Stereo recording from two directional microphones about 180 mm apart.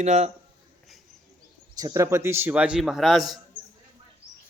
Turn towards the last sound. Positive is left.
turn(degrees=0)  # may be behind; listen again after turning